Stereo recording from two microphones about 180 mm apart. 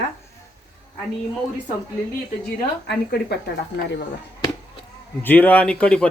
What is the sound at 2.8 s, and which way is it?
Speech, 65° left (ahead or behind).